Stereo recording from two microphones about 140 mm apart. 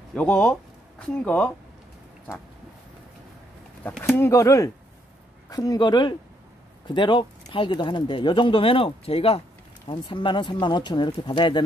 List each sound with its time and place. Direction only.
0.1 s speech: 5° left (ahead or behind)
4.2 s speech: 20° left (ahead or behind)